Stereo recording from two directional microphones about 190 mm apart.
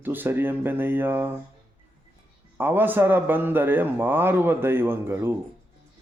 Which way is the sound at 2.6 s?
10° right (ahead or behind).